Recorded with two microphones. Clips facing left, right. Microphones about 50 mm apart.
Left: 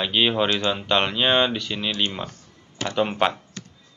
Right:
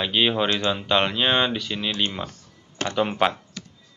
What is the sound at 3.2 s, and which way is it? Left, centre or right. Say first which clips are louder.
Speech: right 1 dB; centre.